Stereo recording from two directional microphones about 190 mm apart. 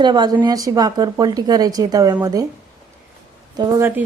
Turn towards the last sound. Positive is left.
turn(degrees=-15)  # may be behind; listen again after turning